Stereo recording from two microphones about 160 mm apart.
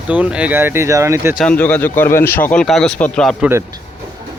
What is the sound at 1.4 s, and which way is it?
A man's voice, 10° left (ahead or behind).